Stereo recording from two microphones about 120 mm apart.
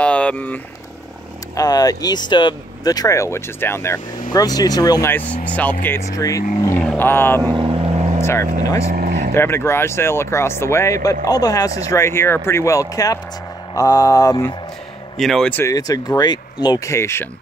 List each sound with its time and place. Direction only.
0.0 s vehicle: 10° left (ahead or behind)
1.6 s speech: 30° left (ahead or behind)
5.1 s speech: 10° left (ahead or behind)
6.1 s speech: 30° left (ahead or behind)
6.8 s speech: 10° left (ahead or behind)
7.4 s vehicle: 40° right (ahead or behind); by 8.2 s 60° right (ahead or behind)
8.2 s speech: 20° left (ahead or behind)
11.9 s speech: 20° left (ahead or behind)
15.1 s speech: centre (ahead or behind)
15.5 s speech: 25° left (ahead or behind)
16.9 s speech: 20° left (ahead or behind)